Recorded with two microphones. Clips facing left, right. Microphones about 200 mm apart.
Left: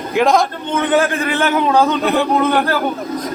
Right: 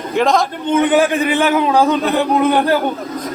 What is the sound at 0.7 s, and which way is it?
Speech, 15° right (ahead or behind).